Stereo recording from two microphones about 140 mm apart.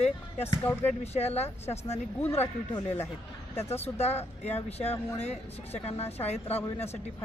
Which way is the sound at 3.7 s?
50° left (ahead or behind).